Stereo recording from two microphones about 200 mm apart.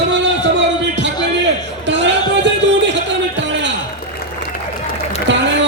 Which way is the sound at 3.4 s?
65° right (ahead or behind).